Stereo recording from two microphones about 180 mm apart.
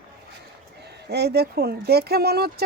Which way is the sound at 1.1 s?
65° right (ahead or behind).